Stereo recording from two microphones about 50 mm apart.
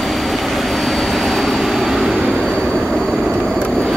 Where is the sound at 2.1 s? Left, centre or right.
Centre.